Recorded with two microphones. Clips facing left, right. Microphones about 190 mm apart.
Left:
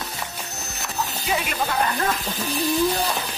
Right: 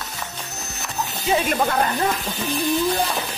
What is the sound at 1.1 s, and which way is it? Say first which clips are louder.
Speech: right 9 dB; 35° right (ahead or behind).